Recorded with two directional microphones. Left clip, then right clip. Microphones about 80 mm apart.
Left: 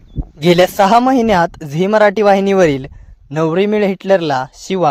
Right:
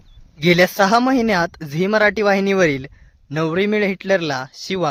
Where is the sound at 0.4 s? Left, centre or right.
Left.